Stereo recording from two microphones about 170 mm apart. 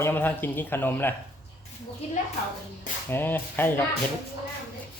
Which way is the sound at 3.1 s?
10° left (ahead or behind).